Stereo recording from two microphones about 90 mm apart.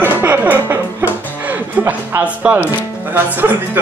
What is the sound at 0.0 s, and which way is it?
Music, 20° right (ahead or behind).